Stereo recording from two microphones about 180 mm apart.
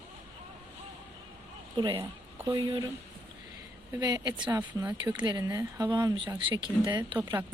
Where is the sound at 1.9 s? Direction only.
15° right (ahead or behind).